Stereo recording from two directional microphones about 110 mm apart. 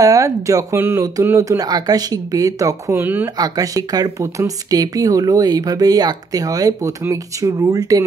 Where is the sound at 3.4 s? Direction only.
35° right (ahead or behind).